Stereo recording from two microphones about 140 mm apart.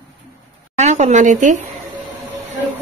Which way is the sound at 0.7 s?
55° right (ahead or behind).